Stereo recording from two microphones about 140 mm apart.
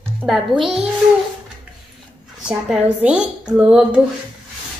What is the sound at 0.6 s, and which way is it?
Speech, 5° right (ahead or behind).